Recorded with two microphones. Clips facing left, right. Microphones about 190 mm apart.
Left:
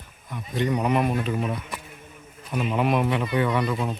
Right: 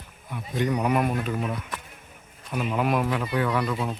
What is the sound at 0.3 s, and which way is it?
A man's voice, 10° right (ahead or behind).